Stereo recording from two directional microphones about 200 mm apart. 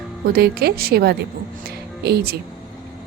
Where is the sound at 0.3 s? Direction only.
50° right (ahead or behind).